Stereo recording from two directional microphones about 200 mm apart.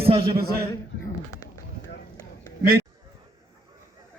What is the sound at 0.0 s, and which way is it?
Speech, 25° right (ahead or behind).